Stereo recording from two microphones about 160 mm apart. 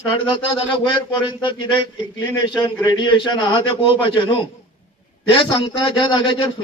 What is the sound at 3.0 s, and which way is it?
Speech, 30° left (ahead or behind).